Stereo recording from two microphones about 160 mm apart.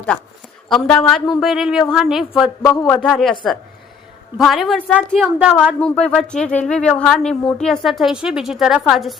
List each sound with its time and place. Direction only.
0.7 s a woman's voice: 5° left (ahead or behind)
2.6 s speech: 15° left (ahead or behind)
3.1 s a woman's voice: centre (ahead or behind)
4.4 s a woman's voice: centre (ahead or behind)
5.2 s a woman's voice: 5° right (ahead or behind)
5.9 s a woman's voice: 5° left (ahead or behind)